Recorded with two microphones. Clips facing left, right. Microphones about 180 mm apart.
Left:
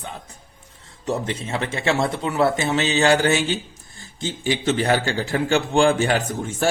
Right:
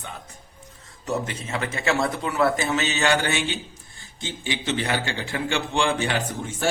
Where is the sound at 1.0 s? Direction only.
30° left (ahead or behind).